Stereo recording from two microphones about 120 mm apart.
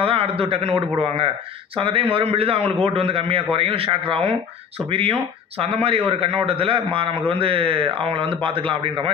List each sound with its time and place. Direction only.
0.0 s a man's voice: 50° right (ahead or behind)